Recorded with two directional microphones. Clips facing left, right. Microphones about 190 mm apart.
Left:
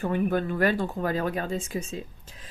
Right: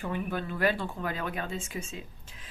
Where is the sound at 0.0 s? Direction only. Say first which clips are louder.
Left 7 dB; 50° left (ahead or behind).